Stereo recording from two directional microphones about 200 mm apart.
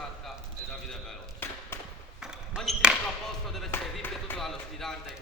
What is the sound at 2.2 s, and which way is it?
Speech, 5° right (ahead or behind).